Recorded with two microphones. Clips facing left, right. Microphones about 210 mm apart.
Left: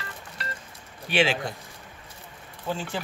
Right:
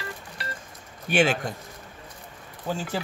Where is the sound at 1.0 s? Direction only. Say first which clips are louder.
Right 2 dB; 45° right (ahead or behind).